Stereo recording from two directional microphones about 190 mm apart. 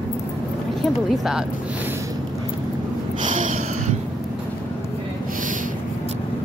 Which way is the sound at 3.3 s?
40° right (ahead or behind).